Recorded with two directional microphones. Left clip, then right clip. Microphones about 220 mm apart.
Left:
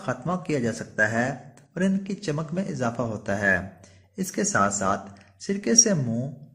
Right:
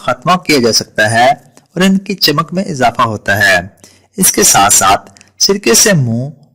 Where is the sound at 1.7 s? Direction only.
45° right (ahead or behind).